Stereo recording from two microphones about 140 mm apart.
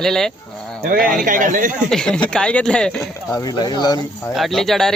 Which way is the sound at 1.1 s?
75° right (ahead or behind).